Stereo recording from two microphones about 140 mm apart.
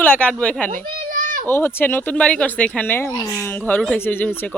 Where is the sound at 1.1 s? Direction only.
85° right.